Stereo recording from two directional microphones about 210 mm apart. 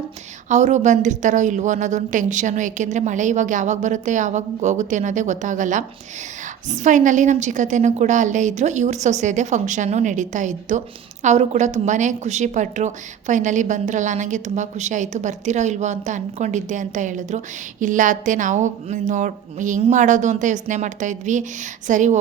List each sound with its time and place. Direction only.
0.4 s a woman's voice: 35° right (ahead or behind)